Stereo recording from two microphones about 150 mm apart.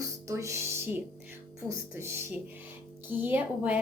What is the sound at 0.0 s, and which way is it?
Music, 20° right (ahead or behind).